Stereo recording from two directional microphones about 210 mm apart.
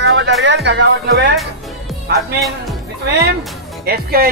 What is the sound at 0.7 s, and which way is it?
Speech, 55° right (ahead or behind).